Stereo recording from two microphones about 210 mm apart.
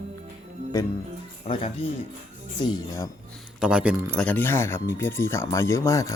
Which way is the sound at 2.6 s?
20° left (ahead or behind).